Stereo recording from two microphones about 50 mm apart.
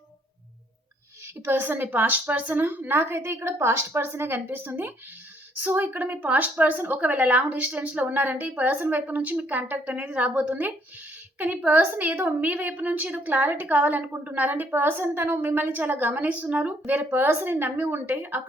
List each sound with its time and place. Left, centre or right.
1.5 s a woman's voice: right
7.0 s a woman's voice: right
16.2 s a woman's voice: right
17.2 s a woman's voice: right